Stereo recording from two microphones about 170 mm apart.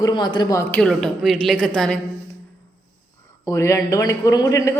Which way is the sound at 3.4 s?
15° left (ahead or behind).